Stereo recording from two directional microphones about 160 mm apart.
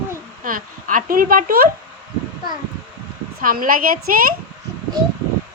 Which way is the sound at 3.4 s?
60° right (ahead or behind).